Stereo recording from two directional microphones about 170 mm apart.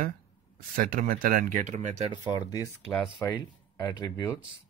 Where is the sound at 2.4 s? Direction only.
20° left (ahead or behind).